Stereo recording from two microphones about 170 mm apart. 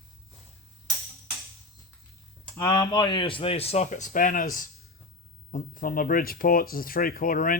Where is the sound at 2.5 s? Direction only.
20° left (ahead or behind).